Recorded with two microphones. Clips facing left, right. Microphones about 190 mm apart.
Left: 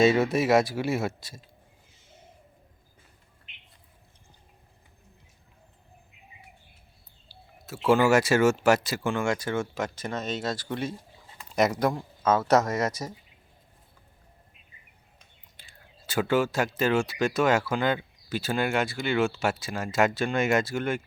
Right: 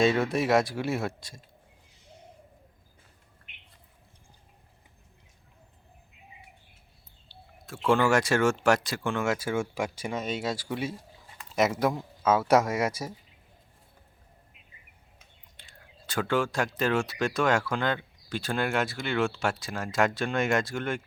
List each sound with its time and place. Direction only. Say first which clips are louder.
0.0 s speech: left 3 dB; 5° left (ahead or behind)
1.9 s a sound: right 5 dB; centre (ahead or behind)
3.5 s bird: left 1 dB; 55° right (ahead or behind)
7.3 s speech: left 2 dB; 5° left (ahead or behind)
15.6 s whispering: even; 5° left (ahead or behind)
16.0 s speech: left 3 dB; 5° left (ahead or behind)